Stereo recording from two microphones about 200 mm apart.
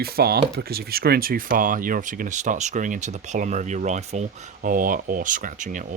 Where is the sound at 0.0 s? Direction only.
50° right (ahead or behind).